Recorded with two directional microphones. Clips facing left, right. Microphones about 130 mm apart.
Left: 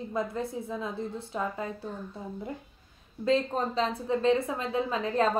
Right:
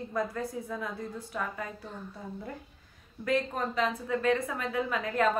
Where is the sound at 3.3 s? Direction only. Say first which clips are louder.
Left 3 dB; 30° left (ahead or behind).